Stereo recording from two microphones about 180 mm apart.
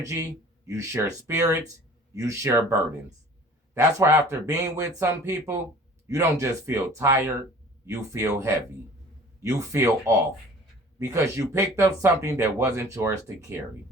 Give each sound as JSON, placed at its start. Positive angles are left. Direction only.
{"t": 0.0, "sound": "speech", "side_deg": -15}
{"t": 3.8, "sound": "speech", "side_deg": -15}